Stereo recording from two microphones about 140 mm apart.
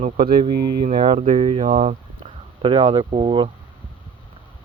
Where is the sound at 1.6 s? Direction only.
55° right (ahead or behind); by 3.5 s 35° right (ahead or behind).